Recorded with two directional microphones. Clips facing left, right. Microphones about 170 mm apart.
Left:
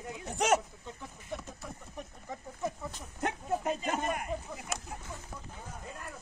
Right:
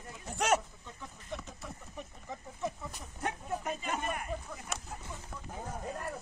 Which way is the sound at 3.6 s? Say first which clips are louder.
Left 4 dB; 35° left (ahead or behind).